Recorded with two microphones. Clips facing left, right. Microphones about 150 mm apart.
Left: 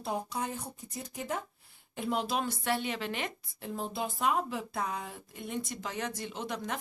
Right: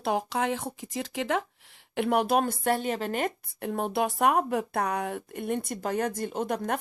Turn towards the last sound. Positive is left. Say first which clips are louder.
# right 7 dB
turn(degrees=-55)  # may be behind; listen again after turning